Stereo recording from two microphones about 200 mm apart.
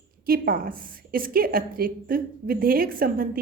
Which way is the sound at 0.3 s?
45° right (ahead or behind).